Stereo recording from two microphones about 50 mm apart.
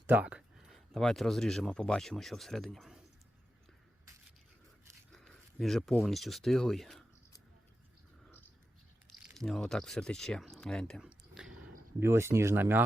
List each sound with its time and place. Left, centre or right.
0.1 s speech: right
0.3 s a sound: centre
0.9 s speech: centre
5.1 s a sound: centre
6.0 s speech: centre
9.5 s speech: centre
11.0 s a sound: centre
11.9 s speech: right
12.5 s speech: right